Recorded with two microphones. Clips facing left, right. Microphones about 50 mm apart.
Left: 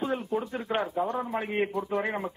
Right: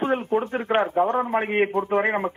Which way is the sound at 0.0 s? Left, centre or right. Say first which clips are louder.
Right 7 dB; right.